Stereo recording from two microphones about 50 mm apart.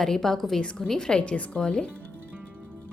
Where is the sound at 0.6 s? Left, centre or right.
Left.